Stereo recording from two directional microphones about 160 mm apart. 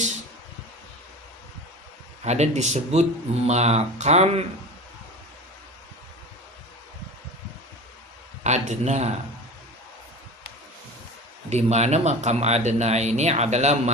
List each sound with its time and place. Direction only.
2.2 s speech: 45° right (ahead or behind)
8.4 s speech: 45° right (ahead or behind)
11.4 s speech: 45° right (ahead or behind)